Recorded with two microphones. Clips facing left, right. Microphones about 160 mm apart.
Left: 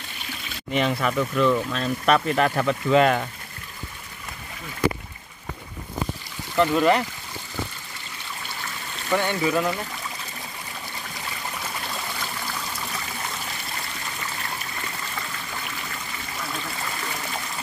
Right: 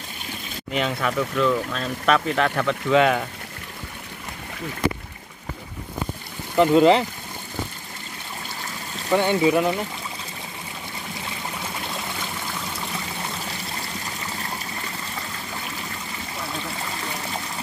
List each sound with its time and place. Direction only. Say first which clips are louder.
0.7 s speech: left 1 dB; centre (ahead or behind)
6.5 s speech: right 4 dB; 20° right (ahead or behind)
9.1 s speech: right 4 dB; 20° right (ahead or behind)